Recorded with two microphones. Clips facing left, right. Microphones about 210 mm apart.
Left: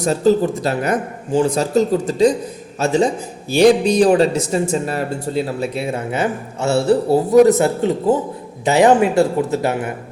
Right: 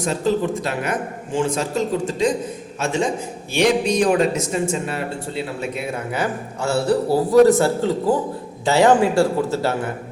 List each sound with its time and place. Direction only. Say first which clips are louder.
0.0 s speech: left 5 dB; 40° left (ahead or behind); by 9.9 s 15° left (ahead or behind)